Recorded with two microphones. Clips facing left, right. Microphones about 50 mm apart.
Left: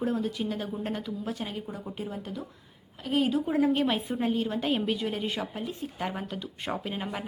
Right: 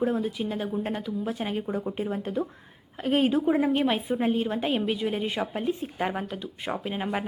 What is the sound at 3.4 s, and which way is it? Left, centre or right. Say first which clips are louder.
Speech: right 2 dB; centre.